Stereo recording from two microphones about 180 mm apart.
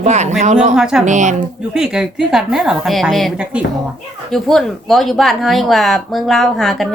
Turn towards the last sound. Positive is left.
turn(degrees=0)  # may be behind; listen again after turning